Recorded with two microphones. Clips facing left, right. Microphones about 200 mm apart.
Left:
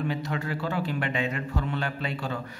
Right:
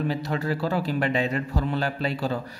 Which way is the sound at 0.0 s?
35° right (ahead or behind).